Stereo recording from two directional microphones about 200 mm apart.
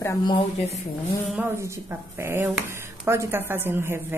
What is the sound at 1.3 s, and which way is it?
Speech, 10° right (ahead or behind).